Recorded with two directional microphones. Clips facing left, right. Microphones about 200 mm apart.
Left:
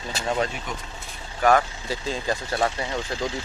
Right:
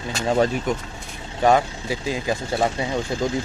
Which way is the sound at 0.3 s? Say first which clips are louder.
Right 7 dB; 35° right (ahead or behind).